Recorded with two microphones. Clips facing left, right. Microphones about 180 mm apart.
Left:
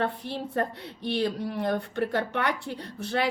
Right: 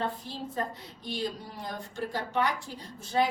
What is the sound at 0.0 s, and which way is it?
Speech, 65° left (ahead or behind).